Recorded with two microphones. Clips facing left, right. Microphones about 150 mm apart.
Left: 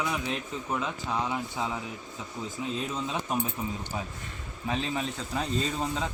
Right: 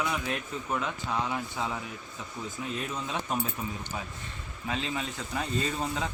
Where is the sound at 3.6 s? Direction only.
20° left (ahead or behind).